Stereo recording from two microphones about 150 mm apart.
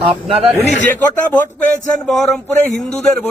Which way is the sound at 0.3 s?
40° right (ahead or behind).